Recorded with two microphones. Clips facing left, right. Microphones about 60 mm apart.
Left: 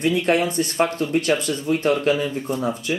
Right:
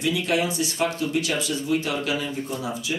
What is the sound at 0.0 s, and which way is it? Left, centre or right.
Speech, left.